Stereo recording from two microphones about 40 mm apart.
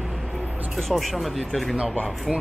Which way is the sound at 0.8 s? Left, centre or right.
Centre.